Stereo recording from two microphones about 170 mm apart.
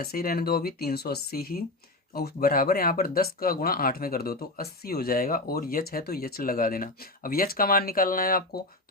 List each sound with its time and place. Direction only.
0.0 s speech: 60° left (ahead or behind)